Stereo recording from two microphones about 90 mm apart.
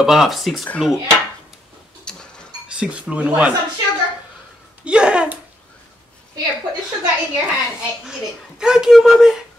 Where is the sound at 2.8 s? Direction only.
15° right (ahead or behind).